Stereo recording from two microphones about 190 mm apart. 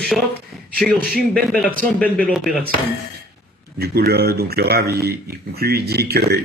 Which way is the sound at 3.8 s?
55° right (ahead or behind).